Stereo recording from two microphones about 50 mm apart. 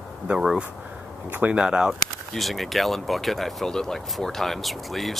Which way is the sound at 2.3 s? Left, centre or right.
Centre.